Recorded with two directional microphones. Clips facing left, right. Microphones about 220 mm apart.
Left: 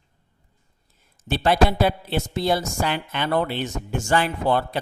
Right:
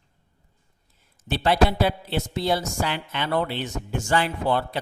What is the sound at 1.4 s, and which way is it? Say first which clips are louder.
A woman's voice: left 1 dB; 45° left (ahead or behind).